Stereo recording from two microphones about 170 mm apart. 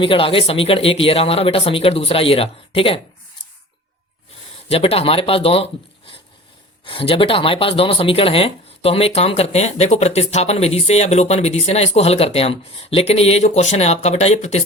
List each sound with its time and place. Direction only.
0.0 s speech: 30° left (ahead or behind)
4.7 s speech: 35° left (ahead or behind)
6.8 s speech: 30° left (ahead or behind)